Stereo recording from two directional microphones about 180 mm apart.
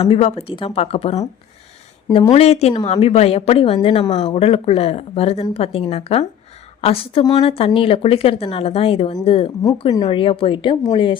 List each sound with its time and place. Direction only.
0.0 s speech: 35° left (ahead or behind)
2.3 s speech: 35° left (ahead or behind)